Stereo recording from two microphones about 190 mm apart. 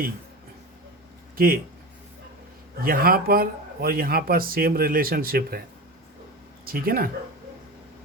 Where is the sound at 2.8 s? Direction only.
50° right (ahead or behind).